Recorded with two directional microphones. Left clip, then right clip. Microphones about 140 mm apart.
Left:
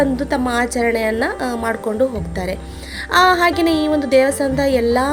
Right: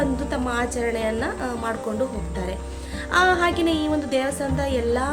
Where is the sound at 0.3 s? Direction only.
55° left (ahead or behind).